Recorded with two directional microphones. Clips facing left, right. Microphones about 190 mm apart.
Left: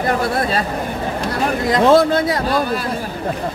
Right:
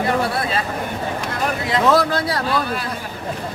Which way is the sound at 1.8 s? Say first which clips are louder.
Left 5 dB; 25° left (ahead or behind).